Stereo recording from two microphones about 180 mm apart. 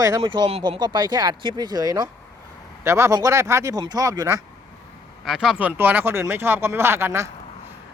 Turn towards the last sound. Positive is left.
turn(degrees=-15)  # may be behind; listen again after turning